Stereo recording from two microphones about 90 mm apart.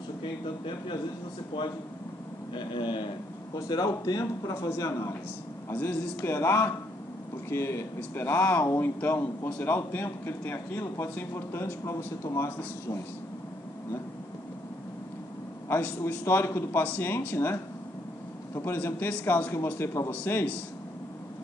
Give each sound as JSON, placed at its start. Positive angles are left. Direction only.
{"t": 0.2, "sound": "speech", "side_deg": 65}
{"t": 2.5, "sound": "speech", "side_deg": 60}
{"t": 3.5, "sound": "a man's voice", "side_deg": 45}
{"t": 15.7, "sound": "speech", "side_deg": 25}